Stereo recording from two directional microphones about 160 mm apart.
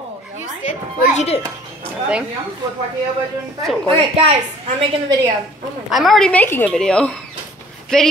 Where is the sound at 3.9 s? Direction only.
35° right (ahead or behind).